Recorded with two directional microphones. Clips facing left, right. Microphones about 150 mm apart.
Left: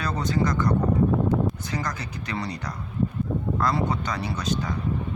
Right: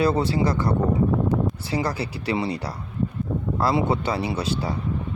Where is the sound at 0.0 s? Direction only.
30° right (ahead or behind).